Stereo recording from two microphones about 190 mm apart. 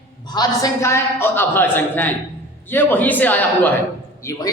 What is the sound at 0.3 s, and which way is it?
A man's voice, 15° left (ahead or behind).